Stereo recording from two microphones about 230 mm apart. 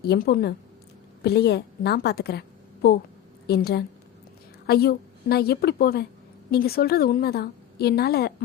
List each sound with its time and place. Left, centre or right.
0.0 s a woman's voice: left
3.4 s a woman's voice: left